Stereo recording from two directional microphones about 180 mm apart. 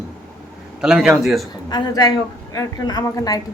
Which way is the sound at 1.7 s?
20° left (ahead or behind).